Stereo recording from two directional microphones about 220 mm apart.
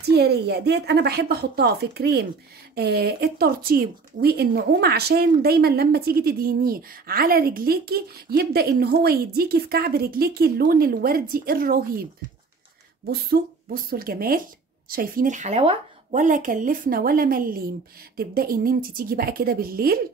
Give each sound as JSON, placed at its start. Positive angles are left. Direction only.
{"t": 0.0, "sound": "speech", "side_deg": -45}
{"t": 13.1, "sound": "a woman's voice", "side_deg": -45}